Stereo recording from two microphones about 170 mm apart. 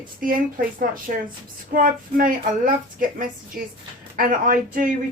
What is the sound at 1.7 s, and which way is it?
Speech, 55° right (ahead or behind).